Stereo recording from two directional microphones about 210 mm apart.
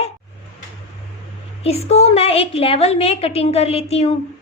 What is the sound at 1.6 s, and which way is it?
A woman's voice, 30° left (ahead or behind).